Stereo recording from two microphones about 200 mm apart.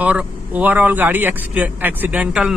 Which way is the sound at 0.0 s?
5° right (ahead or behind).